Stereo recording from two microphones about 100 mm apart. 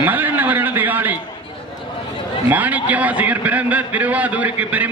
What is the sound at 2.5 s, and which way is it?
A man's voice, 15° right (ahead or behind).